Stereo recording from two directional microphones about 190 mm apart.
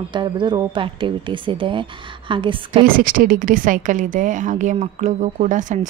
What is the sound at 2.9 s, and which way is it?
A woman's voice, 45° right (ahead or behind).